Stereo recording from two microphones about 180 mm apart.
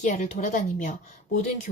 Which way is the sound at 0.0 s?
40° left (ahead or behind).